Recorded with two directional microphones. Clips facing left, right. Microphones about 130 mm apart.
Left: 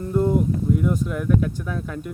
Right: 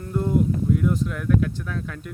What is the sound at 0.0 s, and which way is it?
Speech, 5° left (ahead or behind).